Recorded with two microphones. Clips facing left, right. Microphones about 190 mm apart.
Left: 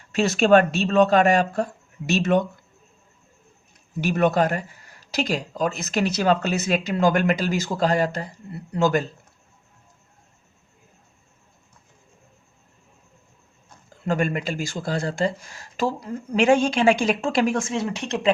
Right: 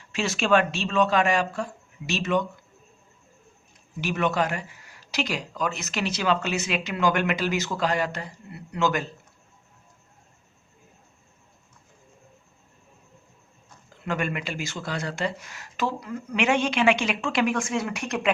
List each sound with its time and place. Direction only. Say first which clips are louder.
0.1 s speech: left 6 dB; 40° left (ahead or behind)
0.9 s a man's voice: left 5 dB; 55° left (ahead or behind)
1.2 s speech: left 5 dB; 40° left (ahead or behind)
4.0 s speech: left 5 dB; 40° left (ahead or behind)
14.0 s speech: left 5 dB; 35° left (ahead or behind)